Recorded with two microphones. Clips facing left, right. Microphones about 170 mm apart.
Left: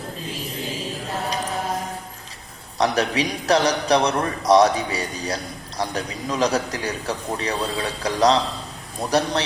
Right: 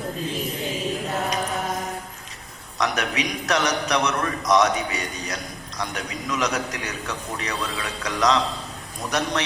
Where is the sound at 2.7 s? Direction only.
30° left (ahead or behind).